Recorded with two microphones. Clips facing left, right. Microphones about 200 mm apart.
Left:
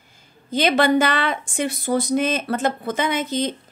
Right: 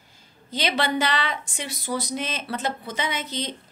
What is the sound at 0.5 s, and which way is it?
A woman's voice, 50° left (ahead or behind).